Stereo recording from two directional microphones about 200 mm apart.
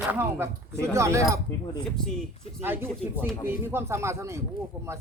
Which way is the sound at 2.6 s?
10° right (ahead or behind).